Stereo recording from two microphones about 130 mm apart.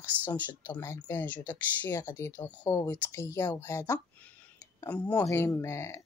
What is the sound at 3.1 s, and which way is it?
Speech, 25° left (ahead or behind).